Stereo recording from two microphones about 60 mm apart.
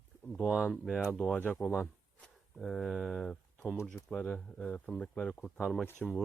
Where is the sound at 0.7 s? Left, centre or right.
Centre.